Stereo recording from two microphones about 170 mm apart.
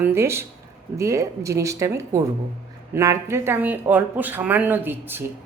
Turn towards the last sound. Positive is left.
turn(degrees=-10)  # may be behind; listen again after turning